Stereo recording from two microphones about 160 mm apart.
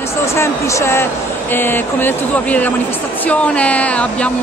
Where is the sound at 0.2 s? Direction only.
15° left (ahead or behind).